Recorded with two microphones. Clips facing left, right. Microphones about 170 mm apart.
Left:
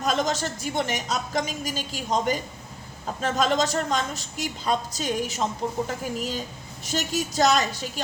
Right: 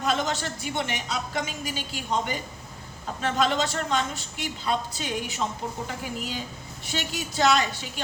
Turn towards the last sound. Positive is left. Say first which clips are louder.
# left 1 dB
turn(degrees=40)  # may be behind; listen again after turning